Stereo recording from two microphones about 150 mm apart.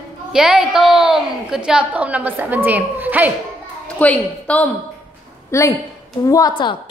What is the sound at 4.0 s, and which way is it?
A woman's voice, 10° left (ahead or behind).